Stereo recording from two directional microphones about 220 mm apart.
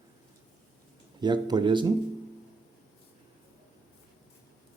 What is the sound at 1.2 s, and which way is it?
Speech, 20° right (ahead or behind).